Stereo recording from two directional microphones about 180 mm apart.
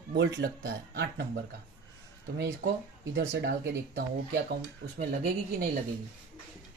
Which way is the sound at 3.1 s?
70° right (ahead or behind).